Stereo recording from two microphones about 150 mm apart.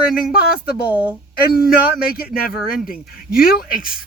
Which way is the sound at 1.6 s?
80° left.